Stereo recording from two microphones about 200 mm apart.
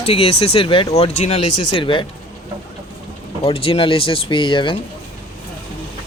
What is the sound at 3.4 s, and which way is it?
Speech, 30° left (ahead or behind).